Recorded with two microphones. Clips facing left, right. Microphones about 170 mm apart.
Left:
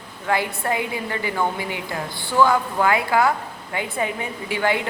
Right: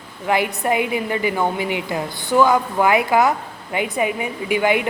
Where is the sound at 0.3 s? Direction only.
20° right (ahead or behind).